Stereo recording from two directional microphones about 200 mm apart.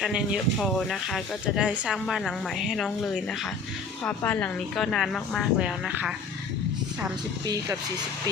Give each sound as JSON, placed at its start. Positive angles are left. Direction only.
{"t": 0.0, "sound": "speech", "side_deg": -5}
{"t": 7.4, "sound": "speech", "side_deg": -20}